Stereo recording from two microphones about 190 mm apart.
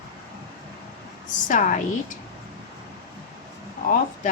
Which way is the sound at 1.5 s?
40° left (ahead or behind).